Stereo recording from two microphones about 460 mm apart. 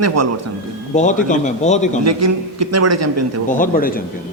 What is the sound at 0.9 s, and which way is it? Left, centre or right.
Speech, centre.